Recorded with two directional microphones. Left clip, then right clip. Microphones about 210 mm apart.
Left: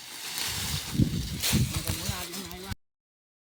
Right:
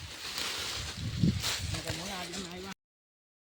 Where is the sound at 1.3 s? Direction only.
50° left (ahead or behind).